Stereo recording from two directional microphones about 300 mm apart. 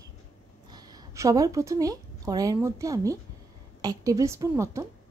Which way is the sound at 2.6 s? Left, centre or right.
Centre.